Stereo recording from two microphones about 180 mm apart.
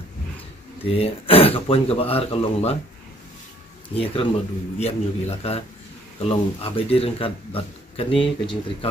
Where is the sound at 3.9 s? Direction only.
30° left (ahead or behind).